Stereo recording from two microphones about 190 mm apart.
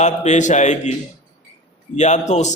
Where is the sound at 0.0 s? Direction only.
35° left (ahead or behind).